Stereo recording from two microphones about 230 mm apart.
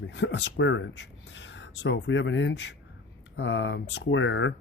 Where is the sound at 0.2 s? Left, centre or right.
Left.